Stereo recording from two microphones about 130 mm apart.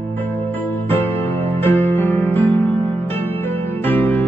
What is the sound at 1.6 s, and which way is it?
Music, 15° left (ahead or behind).